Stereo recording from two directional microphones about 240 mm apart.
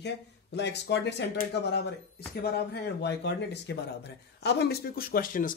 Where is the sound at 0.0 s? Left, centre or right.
Left.